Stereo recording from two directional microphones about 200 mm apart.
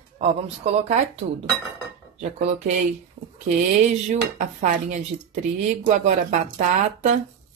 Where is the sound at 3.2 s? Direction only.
40° right (ahead or behind).